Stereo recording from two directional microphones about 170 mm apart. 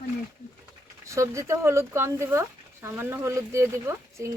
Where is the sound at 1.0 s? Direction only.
15° right (ahead or behind).